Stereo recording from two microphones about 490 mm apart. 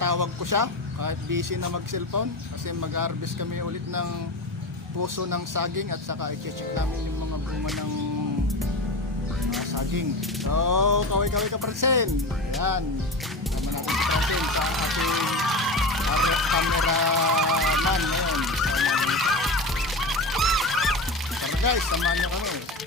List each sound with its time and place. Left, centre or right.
0.0 s speech: right
9.7 s speech: right
13.8 s speech: centre
16.9 s speech: right
17.6 s goose: centre
21.9 s speech: centre